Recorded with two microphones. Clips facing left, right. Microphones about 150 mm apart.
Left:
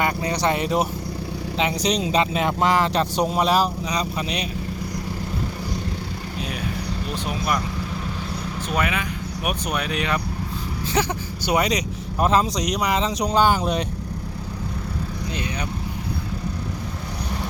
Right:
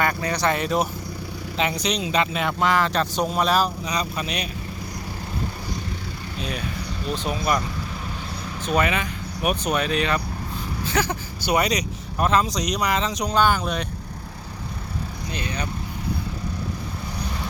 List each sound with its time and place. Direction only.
0.0 s speech: 20° left (ahead or behind)
1.7 s speech: 35° left (ahead or behind)
8.6 s speech: 5° left (ahead or behind); by 12.5 s 30° left (ahead or behind)
12.5 s speech: 5° left (ahead or behind)
12.9 s speech: 30° left (ahead or behind)
15.3 s vehicle: 15° left (ahead or behind)